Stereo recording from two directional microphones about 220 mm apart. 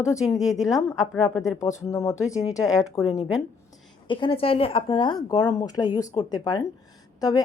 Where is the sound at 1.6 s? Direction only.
15° left (ahead or behind).